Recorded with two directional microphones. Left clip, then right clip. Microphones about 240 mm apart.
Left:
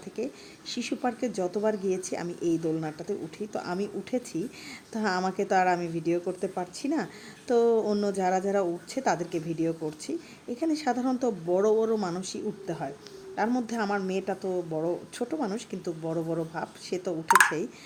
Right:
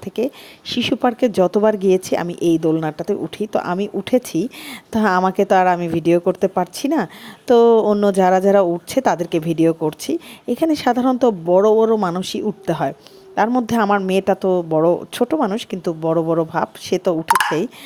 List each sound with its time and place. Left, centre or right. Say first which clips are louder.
0.7 s speech: right 13 dB; right
17.2 s speech: right 2 dB; centre